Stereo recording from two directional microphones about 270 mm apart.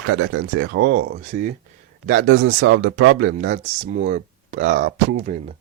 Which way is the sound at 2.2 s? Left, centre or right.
Right.